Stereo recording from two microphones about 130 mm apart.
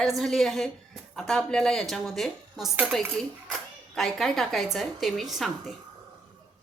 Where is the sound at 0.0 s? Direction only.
Centre (ahead or behind).